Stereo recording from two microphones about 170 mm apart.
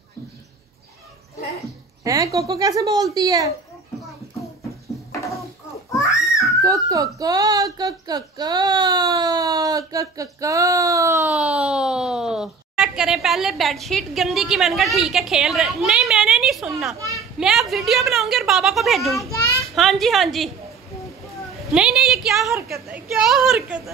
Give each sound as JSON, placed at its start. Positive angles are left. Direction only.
{"t": 2.0, "sound": "speech", "side_deg": -20}
{"t": 5.9, "sound": "babbling", "side_deg": 15}
{"t": 6.6, "sound": "speech", "side_deg": -20}
{"t": 11.3, "sound": "speech", "side_deg": -5}
{"t": 17.4, "sound": "a sound", "side_deg": 0}
{"t": 21.7, "sound": "speech", "side_deg": -5}